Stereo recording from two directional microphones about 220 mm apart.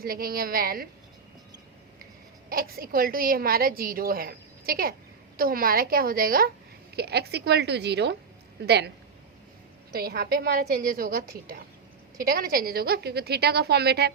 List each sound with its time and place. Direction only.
0.0 s a woman's voice: 40° right (ahead or behind)
2.5 s a woman's voice: 40° right (ahead or behind)
9.9 s a woman's voice: 45° right (ahead or behind)